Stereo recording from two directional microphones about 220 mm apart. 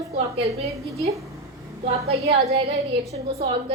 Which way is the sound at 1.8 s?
30° right (ahead or behind).